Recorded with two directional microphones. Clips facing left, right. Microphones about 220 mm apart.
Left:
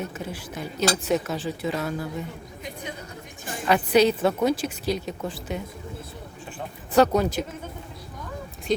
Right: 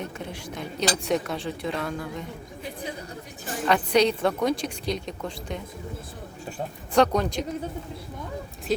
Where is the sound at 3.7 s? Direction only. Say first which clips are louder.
Left 2 dB; 5° left (ahead or behind).